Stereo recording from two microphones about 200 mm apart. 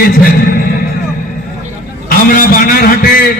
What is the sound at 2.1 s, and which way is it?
A man's voice, 45° left (ahead or behind).